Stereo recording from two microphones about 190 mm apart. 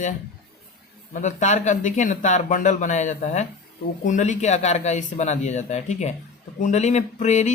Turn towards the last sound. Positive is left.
turn(degrees=40)  # may be behind; listen again after turning